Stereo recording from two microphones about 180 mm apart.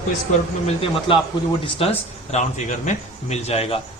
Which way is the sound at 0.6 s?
30° left (ahead or behind).